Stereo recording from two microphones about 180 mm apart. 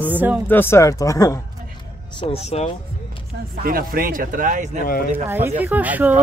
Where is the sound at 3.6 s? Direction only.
55° right (ahead or behind).